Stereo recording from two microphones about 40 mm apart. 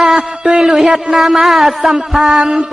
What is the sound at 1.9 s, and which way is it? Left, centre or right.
Speech, centre.